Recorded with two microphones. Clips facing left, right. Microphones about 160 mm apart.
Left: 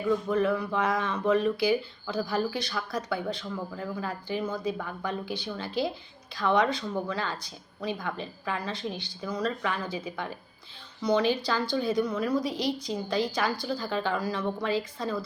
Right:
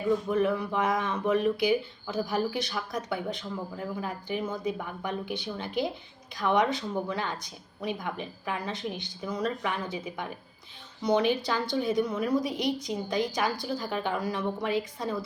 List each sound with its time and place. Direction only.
0.3 s a woman's voice: 15° right (ahead or behind)